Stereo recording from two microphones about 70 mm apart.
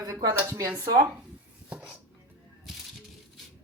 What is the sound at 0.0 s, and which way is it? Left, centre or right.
Speech, right.